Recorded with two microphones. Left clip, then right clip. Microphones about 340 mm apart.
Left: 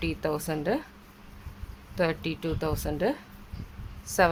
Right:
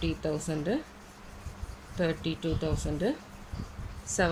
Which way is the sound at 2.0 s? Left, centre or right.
Centre.